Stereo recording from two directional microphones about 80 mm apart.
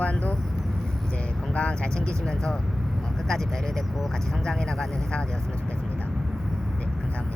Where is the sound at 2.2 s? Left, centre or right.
Centre.